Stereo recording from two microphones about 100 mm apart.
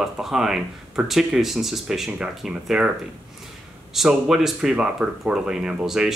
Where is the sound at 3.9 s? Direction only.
5° right (ahead or behind).